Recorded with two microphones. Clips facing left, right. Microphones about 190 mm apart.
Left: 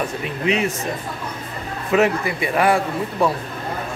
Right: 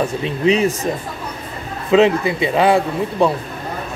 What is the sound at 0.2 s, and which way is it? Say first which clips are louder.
Speech: right 6 dB; 35° right (ahead or behind).